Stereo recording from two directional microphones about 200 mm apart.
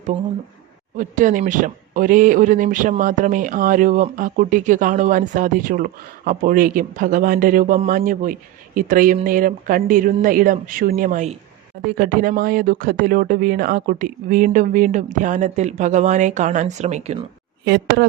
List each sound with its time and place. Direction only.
0.9 s speech: 40° right (ahead or behind)
17.7 s speech: 55° right (ahead or behind)